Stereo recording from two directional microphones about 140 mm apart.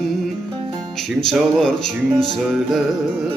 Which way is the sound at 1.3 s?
5° left (ahead or behind).